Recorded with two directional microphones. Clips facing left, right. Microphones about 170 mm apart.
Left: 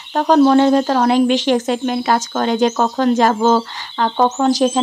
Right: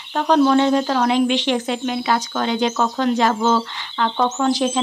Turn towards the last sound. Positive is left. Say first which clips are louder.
# left 4 dB
turn(degrees=40)  # may be behind; listen again after turning